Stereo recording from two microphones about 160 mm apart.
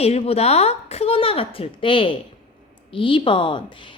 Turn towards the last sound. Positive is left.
turn(degrees=30)  # may be behind; listen again after turning